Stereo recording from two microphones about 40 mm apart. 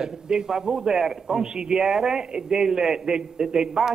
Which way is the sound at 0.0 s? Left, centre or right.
Centre.